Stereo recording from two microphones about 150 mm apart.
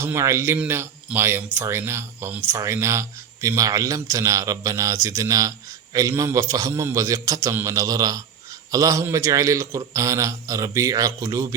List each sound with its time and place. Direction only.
0.0 s a man's voice: 20° right (ahead or behind)